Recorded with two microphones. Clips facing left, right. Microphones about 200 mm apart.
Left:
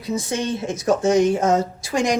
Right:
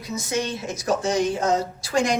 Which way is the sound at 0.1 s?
30° left (ahead or behind).